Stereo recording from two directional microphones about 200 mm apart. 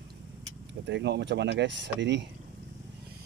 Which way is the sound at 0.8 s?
60° right (ahead or behind).